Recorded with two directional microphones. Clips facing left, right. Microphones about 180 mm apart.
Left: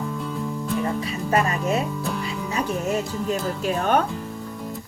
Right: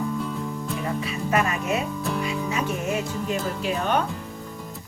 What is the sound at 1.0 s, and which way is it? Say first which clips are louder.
Speech: left 1 dB; 35° left (ahead or behind).